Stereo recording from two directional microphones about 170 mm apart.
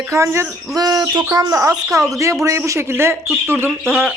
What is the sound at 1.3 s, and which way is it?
Speech, 20° right (ahead or behind).